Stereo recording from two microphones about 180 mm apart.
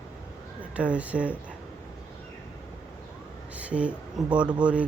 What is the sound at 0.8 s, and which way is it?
Speech, 5° right (ahead or behind).